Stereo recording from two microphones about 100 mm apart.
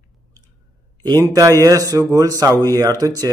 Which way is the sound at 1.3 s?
35° right (ahead or behind).